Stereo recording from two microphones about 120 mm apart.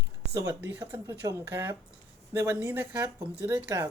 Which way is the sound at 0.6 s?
15° right (ahead or behind).